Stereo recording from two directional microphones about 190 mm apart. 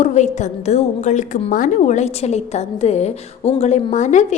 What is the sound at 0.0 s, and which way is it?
A woman's voice, 40° left (ahead or behind).